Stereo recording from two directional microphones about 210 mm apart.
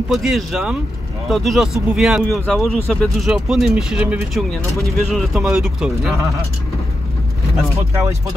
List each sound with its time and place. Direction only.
0.1 s speech: centre (ahead or behind)